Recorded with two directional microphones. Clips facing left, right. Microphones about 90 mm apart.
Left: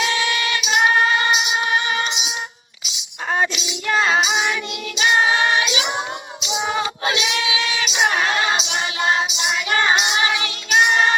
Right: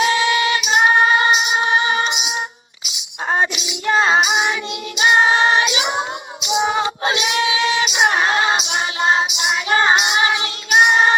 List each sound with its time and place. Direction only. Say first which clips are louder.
0.0 s female singing: right 5 dB; 30° right (ahead or behind)
3.2 s music: right 2 dB; 30° right (ahead or behind)
4.9 s singing: right 3 dB; 30° right (ahead or behind)
6.6 s female singing: right 4 dB; 25° right (ahead or behind)
7.9 s music: even; 25° right (ahead or behind)
9.9 s child singing: right 2 dB; 40° right (ahead or behind)
10.2 s child singing: right 2 dB; 25° right (ahead or behind)